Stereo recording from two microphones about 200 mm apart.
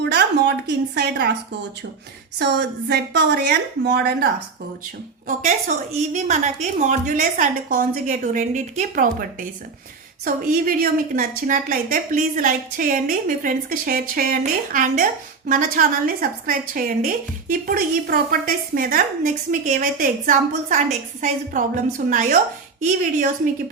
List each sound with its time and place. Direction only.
0.0 s a sound: 60° right (ahead or behind)
0.9 s a woman's voice: 55° right (ahead or behind)
2.4 s a woman's voice: 55° right (ahead or behind)
5.4 s a woman's voice: 35° right (ahead or behind)